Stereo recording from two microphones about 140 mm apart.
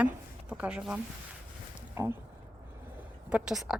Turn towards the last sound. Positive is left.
turn(degrees=-5)  # may be behind; listen again after turning